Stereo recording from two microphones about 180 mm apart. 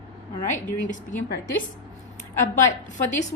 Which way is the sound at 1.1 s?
45° left (ahead or behind).